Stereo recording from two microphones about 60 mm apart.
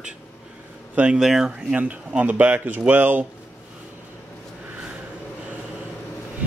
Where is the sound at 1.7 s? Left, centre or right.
Right.